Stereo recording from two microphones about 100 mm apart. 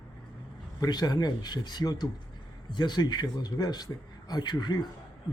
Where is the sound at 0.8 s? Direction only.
40° left (ahead or behind).